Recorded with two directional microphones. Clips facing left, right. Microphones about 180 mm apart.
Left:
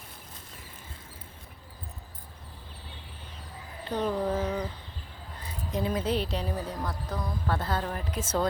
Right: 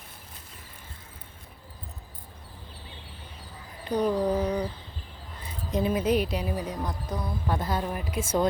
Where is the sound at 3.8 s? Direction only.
15° right (ahead or behind).